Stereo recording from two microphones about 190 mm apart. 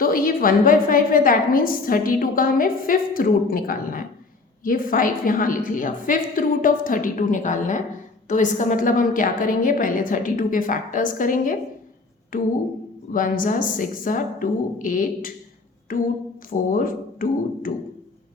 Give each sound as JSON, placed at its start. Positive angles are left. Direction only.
{"t": 0.0, "sound": "a woman's voice", "side_deg": 50}